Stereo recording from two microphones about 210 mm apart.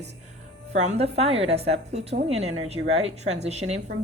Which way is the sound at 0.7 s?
35° right (ahead or behind).